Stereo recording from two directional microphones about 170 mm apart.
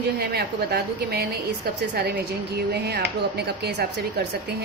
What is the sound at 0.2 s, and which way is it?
A woman's voice, 70° right (ahead or behind).